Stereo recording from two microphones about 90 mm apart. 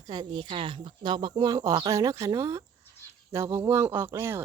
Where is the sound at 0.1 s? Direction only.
60° right (ahead or behind).